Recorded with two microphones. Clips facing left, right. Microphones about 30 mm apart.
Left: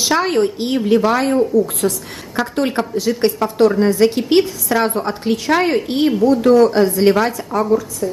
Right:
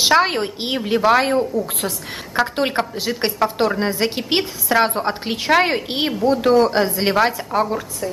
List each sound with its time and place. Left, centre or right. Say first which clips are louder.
0.0 s a woman's voice: even; right